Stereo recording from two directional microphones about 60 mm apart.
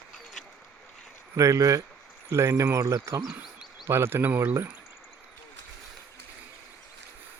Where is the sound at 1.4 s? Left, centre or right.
Right.